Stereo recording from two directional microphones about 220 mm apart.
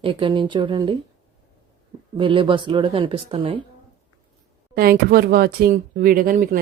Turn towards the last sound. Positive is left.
turn(degrees=-40)  # may be behind; listen again after turning